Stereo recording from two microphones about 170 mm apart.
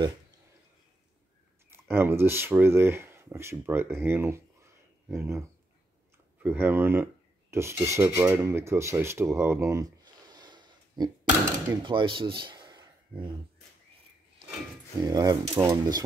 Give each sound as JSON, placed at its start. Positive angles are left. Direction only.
{"t": 1.7, "sound": "speech", "side_deg": -15}
{"t": 6.4, "sound": "speech", "side_deg": -10}
{"t": 15.0, "sound": "speech", "side_deg": -20}